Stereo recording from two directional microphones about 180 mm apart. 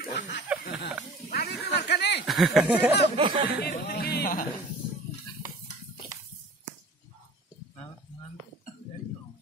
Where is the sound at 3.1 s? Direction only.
30° right (ahead or behind).